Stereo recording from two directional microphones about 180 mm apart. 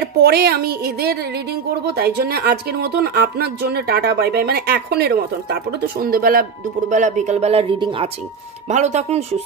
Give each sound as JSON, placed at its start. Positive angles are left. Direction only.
{"t": 0.0, "sound": "a woman's voice", "side_deg": -60}
{"t": 6.9, "sound": "speech", "side_deg": -45}
{"t": 8.6, "sound": "speech", "side_deg": -40}